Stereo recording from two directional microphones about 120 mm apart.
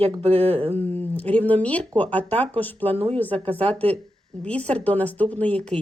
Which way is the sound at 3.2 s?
15° left (ahead or behind).